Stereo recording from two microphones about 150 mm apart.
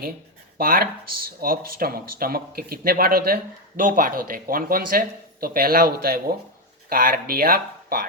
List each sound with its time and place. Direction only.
0.6 s speech: 75° right (ahead or behind)